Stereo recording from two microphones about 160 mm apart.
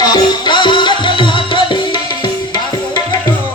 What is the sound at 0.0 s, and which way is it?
Music, 25° left (ahead or behind).